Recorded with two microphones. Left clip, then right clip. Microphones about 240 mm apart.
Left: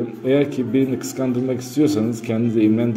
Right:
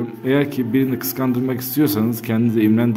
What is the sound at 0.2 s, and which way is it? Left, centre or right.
Speech, right.